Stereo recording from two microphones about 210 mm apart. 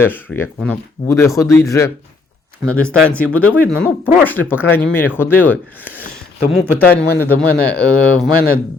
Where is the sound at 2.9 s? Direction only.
5° left (ahead or behind).